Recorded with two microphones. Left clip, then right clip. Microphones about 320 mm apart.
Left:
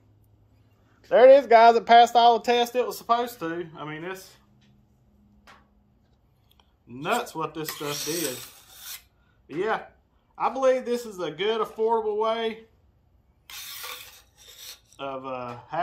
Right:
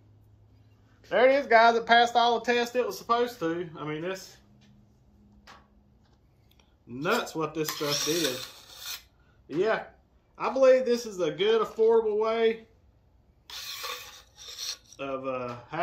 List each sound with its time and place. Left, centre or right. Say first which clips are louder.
1.0 s speech: left 8 dB; left; by 4.2 s centre
6.5 s speech: right 2 dB; centre
10.3 s speech: right 2 dB; centre
14.1 s filing: right 6 dB; centre